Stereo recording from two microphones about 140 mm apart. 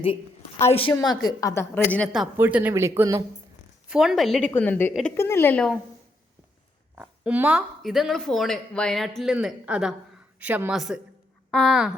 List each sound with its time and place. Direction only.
0.7 s a woman's voice: 40° left (ahead or behind)
1.2 s a woman's voice: 25° left (ahead or behind)
1.7 s a woman's voice: 10° left (ahead or behind)
2.4 s speech: 10° right (ahead or behind)
3.8 s a woman's voice: 5° right (ahead or behind); by 5.6 s 15° left (ahead or behind)
6.9 s speech: 10° right (ahead or behind)